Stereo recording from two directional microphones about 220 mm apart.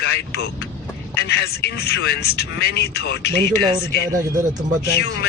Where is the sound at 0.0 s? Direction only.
50° left (ahead or behind).